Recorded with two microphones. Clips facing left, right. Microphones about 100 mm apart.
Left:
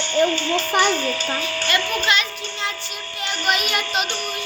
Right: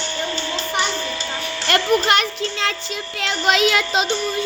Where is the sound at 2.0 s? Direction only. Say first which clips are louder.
Right 4 dB; 75° right (ahead or behind).